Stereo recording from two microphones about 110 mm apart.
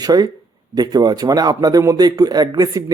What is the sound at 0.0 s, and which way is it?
A man's voice, 35° right (ahead or behind).